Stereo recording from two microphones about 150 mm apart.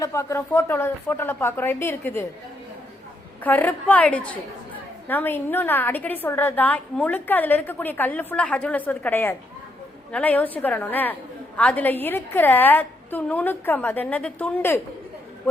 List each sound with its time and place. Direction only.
0.0 s a woman's voice: 20° left (ahead or behind)
3.4 s a woman's voice: 10° left (ahead or behind)